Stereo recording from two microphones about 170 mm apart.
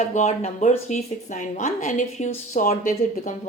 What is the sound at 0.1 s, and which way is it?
A woman's voice, 45° left (ahead or behind).